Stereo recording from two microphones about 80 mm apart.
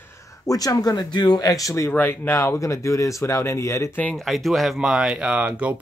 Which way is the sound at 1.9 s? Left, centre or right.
Left.